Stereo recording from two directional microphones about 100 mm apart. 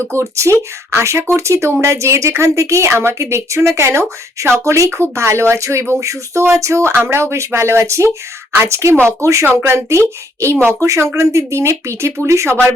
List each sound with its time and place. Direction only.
0.0 s a woman's voice: 25° right (ahead or behind)